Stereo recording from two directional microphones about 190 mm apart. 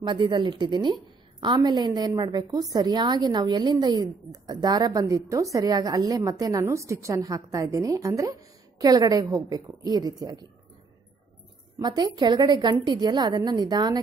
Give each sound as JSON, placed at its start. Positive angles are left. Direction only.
{"t": 0.0, "sound": "a woman's voice", "side_deg": -25}
{"t": 11.8, "sound": "a woman's voice", "side_deg": -20}